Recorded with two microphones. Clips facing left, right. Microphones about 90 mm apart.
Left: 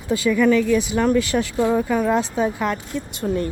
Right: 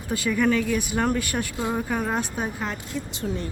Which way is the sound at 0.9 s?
90° left.